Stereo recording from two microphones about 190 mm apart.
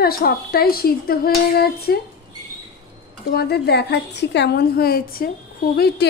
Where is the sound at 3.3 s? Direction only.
55° left (ahead or behind).